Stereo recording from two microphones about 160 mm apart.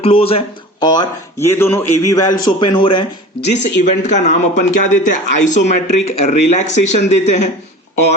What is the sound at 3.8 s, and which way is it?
Speech, 50° left (ahead or behind).